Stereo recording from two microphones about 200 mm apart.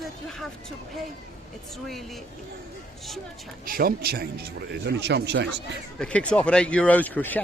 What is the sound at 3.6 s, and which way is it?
Speech, 45° right (ahead or behind).